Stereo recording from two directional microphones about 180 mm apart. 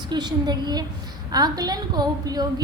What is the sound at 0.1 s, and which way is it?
A woman's voice, 25° right (ahead or behind).